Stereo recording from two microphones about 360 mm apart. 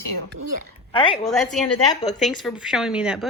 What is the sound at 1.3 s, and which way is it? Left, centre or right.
A woman's voice, centre.